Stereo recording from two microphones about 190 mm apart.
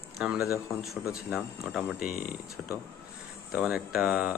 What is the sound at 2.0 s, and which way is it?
Speech, 50° left (ahead or behind).